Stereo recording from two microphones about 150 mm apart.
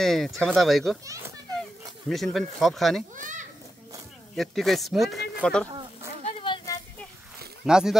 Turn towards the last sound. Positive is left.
turn(degrees=-5)  # may be behind; listen again after turning